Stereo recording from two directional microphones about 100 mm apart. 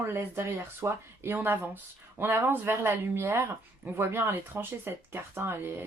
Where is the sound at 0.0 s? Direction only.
25° right (ahead or behind).